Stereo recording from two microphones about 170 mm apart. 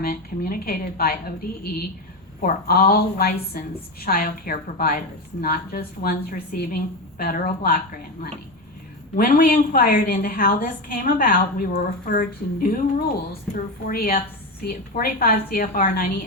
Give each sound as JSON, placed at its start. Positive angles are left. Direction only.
{"t": 0.0, "sound": "a woman's voice", "side_deg": 55}
{"t": 2.4, "sound": "a woman's voice", "side_deg": 55}
{"t": 9.1, "sound": "a woman's voice", "side_deg": 55}